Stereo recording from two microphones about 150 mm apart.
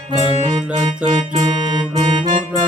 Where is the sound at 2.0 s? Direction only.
30° right (ahead or behind).